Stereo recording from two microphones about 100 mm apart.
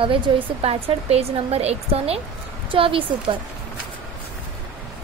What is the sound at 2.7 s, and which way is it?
Speech, 60° right (ahead or behind).